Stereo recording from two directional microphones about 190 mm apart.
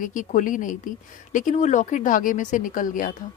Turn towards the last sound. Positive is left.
turn(degrees=45)  # may be behind; listen again after turning